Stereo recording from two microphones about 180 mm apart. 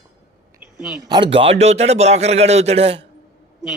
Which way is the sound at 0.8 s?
5° right (ahead or behind).